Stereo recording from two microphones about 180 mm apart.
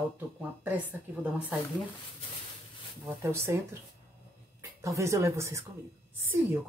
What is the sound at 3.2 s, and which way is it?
Speech, 15° right (ahead or behind).